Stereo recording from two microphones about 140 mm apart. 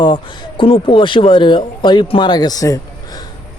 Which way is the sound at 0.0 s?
35° left (ahead or behind).